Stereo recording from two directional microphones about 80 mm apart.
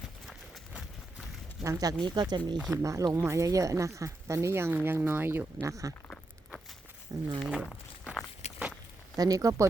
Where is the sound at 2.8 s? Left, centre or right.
Right.